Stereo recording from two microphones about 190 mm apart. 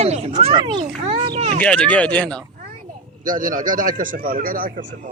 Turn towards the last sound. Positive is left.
turn(degrees=-50)  # may be behind; listen again after turning